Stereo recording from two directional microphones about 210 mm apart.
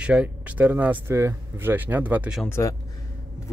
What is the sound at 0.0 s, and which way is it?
Speech, 5° right (ahead or behind).